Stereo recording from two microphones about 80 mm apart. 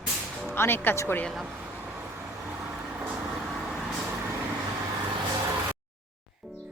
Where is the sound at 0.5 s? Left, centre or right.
Left.